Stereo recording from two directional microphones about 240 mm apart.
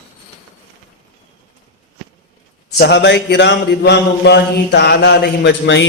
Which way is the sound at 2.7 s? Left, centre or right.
Left.